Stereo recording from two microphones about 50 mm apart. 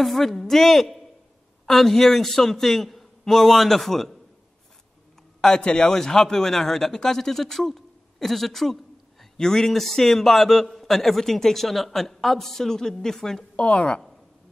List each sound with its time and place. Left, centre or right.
0.0 s a man's voice: centre
5.4 s a man's voice: centre
13.7 s a woman's voice: left